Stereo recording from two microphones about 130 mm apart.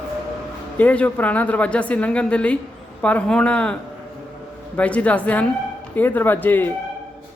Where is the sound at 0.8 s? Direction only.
10° left (ahead or behind).